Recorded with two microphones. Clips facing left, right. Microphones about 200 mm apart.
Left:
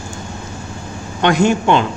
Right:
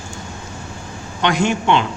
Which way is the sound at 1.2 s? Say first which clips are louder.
Left 4 dB; 45° left (ahead or behind).